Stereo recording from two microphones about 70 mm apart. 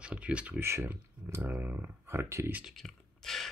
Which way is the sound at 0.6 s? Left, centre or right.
Right.